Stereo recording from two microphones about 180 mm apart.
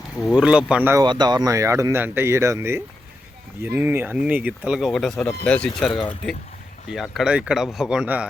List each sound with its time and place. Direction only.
0.2 s a man's voice: 5° right (ahead or behind)
1.0 s speech: 25° right (ahead or behind); by 5.7 s 5° left (ahead or behind)
6.9 s a man's voice: centre (ahead or behind)